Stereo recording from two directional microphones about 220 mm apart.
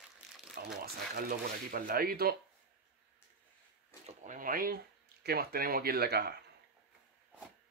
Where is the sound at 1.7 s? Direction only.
40° right (ahead or behind).